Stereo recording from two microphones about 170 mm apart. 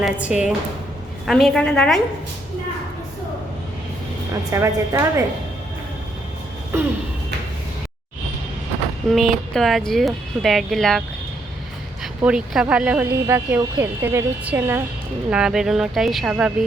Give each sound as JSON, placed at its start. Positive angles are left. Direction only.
{"t": 0.0, "sound": "speech", "side_deg": -10}
{"t": 4.5, "sound": "speech", "side_deg": -15}
{"t": 9.0, "sound": "speech", "side_deg": 0}
{"t": 12.2, "sound": "speech", "side_deg": -5}